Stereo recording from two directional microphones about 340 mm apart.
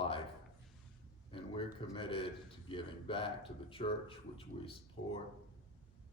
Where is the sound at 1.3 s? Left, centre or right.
Centre.